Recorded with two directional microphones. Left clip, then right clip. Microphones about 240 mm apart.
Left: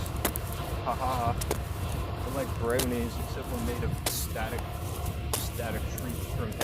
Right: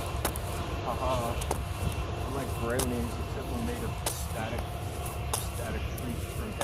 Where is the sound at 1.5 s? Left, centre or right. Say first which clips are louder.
Left 1 dB; left.